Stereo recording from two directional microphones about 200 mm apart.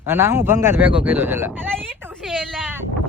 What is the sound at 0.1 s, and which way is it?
Speech, 10° right (ahead or behind).